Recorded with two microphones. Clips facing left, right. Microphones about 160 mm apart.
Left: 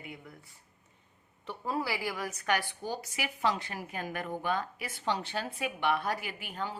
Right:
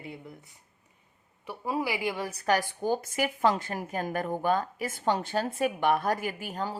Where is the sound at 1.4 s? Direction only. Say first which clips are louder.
Right 3 dB; 10° right (ahead or behind).